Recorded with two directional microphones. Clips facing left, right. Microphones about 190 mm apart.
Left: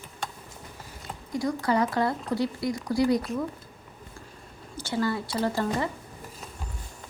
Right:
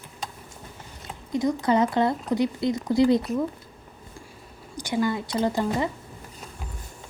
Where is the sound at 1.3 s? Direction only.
20° right (ahead or behind).